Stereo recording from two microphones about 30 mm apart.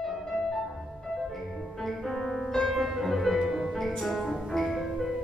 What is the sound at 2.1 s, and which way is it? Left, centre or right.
Music, centre.